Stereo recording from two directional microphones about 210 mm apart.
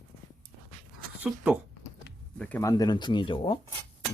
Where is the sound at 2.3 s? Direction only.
5° left (ahead or behind).